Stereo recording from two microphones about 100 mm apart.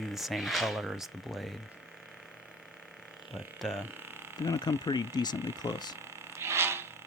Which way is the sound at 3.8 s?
20° right (ahead or behind).